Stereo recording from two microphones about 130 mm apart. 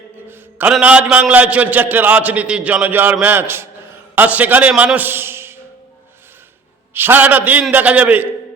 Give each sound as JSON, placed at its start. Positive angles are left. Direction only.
{"t": 0.8, "sound": "a man's voice", "side_deg": -10}
{"t": 6.9, "sound": "a man's voice", "side_deg": -15}